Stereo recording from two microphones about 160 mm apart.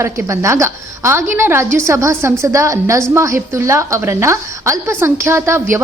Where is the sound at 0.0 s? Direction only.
15° right (ahead or behind).